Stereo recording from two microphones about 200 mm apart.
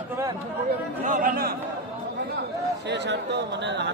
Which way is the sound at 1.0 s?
40° right (ahead or behind).